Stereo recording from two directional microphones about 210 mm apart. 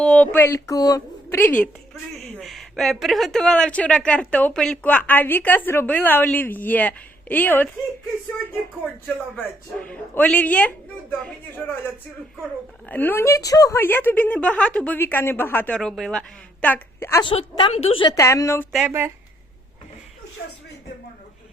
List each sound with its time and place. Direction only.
0.0 s speech: 5° left (ahead or behind)
0.3 s speech: 15° left (ahead or behind)
9.3 s speech: 5° left (ahead or behind)
12.9 s speech: 10° left (ahead or behind)
17.2 s a woman's voice: 25° left (ahead or behind)
18.7 s speech: 5° right (ahead or behind)